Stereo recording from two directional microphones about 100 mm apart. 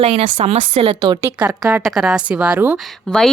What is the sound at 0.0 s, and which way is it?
Speech, 90° right.